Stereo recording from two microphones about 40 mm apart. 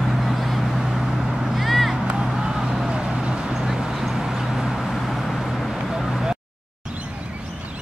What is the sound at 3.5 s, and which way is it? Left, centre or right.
Vehicle, centre.